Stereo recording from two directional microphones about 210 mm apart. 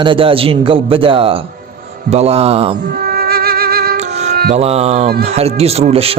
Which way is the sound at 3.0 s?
45° right (ahead or behind).